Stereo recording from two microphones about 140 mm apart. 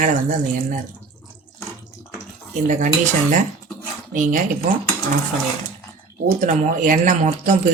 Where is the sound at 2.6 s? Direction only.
65° right (ahead or behind).